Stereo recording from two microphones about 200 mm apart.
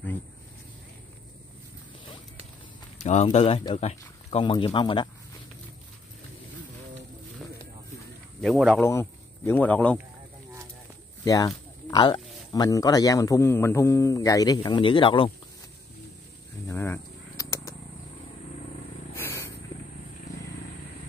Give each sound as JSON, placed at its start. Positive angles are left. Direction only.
{"t": 3.0, "sound": "speech", "side_deg": 35}
{"t": 8.4, "sound": "speech", "side_deg": 0}
{"t": 8.8, "sound": "speech", "side_deg": 10}
{"t": 11.2, "sound": "speech", "side_deg": 15}
{"t": 16.6, "sound": "a sound", "side_deg": 10}
{"t": 19.1, "sound": "a sound", "side_deg": 10}